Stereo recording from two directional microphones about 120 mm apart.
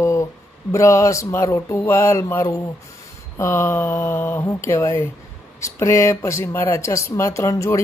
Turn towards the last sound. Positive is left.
turn(degrees=25)  # may be behind; listen again after turning